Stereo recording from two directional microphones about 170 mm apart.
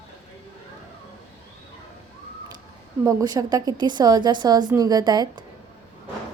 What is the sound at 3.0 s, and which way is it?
A woman's voice, 20° right (ahead or behind).